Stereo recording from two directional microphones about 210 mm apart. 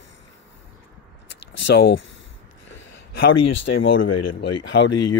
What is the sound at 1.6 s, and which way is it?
Speech, 55° left (ahead or behind).